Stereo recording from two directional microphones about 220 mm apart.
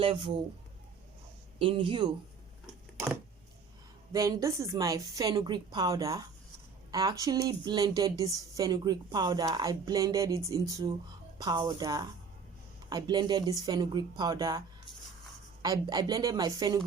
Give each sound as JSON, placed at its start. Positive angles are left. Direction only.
{"t": 0.0, "sound": "speech", "side_deg": -25}
{"t": 1.5, "sound": "speech", "side_deg": -25}
{"t": 4.1, "sound": "a woman's voice", "side_deg": -15}
{"t": 15.6, "sound": "a woman's voice", "side_deg": -15}